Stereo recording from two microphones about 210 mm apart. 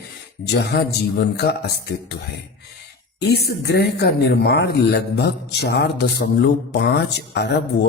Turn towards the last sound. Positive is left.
turn(degrees=55)  # may be behind; listen again after turning